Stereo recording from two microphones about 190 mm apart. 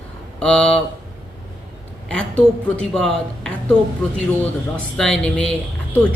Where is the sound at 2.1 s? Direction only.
5° left (ahead or behind).